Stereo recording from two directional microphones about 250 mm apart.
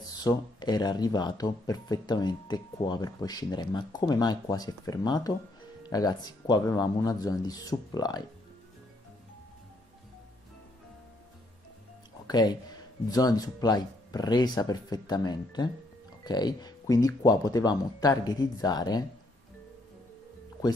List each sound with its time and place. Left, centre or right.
0.0 s speech: centre
12.3 s speech: centre